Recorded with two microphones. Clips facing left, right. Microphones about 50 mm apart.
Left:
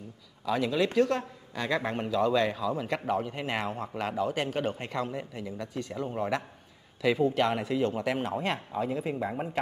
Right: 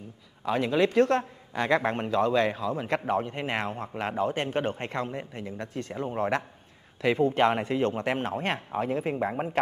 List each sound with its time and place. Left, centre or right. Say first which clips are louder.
0.5 s a man's voice: right 3 dB; right